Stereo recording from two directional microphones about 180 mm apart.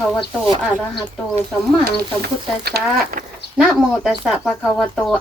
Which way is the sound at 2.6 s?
60° right (ahead or behind).